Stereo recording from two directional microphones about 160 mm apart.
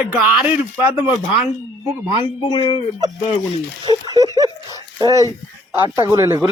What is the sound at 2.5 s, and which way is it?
Speech, 30° left (ahead or behind).